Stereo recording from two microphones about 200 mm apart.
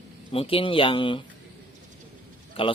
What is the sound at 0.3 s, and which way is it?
Speech, 25° left (ahead or behind).